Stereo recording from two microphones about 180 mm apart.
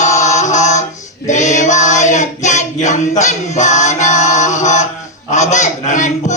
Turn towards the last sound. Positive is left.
turn(degrees=40)  # may be behind; listen again after turning